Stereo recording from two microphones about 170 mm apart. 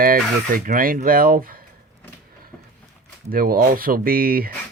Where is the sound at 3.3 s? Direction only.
60° right (ahead or behind).